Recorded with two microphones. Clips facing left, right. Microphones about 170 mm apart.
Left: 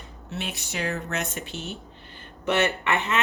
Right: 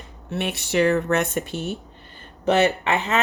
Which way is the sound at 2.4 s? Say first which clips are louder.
Right 5 dB; 35° right (ahead or behind).